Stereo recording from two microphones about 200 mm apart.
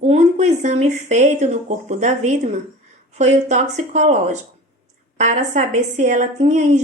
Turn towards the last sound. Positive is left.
turn(degrees=-35)  # may be behind; listen again after turning